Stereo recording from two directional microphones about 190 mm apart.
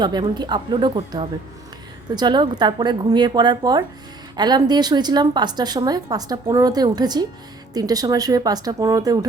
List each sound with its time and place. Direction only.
0.0 s a woman's voice: 20° right (ahead or behind)